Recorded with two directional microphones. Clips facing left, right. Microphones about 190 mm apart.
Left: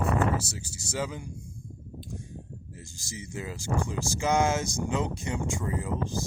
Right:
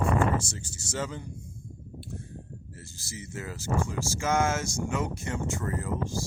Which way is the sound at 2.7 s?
15° left (ahead or behind).